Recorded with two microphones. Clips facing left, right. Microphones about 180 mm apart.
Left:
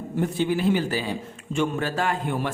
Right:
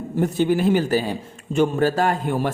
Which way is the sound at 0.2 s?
45° right (ahead or behind).